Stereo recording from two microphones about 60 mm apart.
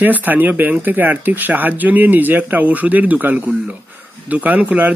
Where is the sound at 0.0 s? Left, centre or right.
Right.